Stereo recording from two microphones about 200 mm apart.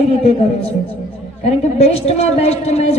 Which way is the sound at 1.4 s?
30° left (ahead or behind).